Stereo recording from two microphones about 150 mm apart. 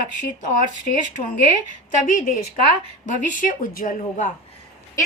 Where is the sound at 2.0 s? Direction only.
60° left (ahead or behind).